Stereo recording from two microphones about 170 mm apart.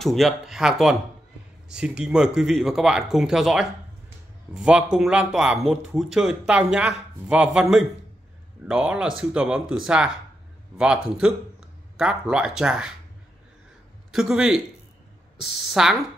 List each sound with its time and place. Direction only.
0.0 s speech: centre (ahead or behind)
14.1 s speech: 5° right (ahead or behind)